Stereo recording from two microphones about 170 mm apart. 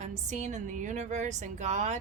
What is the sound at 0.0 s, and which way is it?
A woman's voice, 45° right (ahead or behind).